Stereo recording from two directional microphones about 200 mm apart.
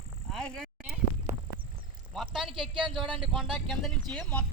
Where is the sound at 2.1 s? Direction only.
Centre (ahead or behind).